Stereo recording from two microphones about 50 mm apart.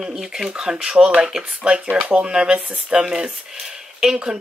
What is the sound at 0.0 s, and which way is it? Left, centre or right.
A woman's voice, centre.